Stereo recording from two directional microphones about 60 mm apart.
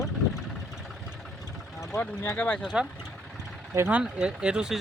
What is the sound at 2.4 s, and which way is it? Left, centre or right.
Speech, left.